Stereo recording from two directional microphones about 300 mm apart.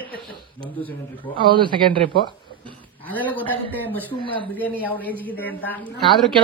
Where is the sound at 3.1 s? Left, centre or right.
Centre.